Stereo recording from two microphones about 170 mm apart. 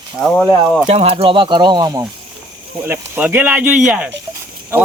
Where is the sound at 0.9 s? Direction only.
35° right (ahead or behind); by 4.1 s 5° right (ahead or behind).